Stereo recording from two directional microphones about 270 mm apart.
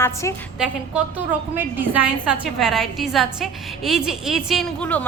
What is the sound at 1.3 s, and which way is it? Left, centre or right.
A woman's voice, centre.